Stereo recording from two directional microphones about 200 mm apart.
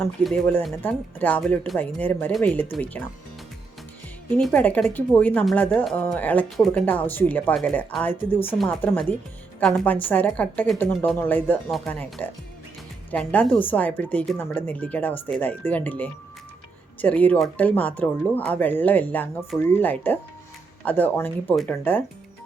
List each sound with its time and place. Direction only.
0.3 s speech: 5° left (ahead or behind)
4.3 s speech: 5° left (ahead or behind)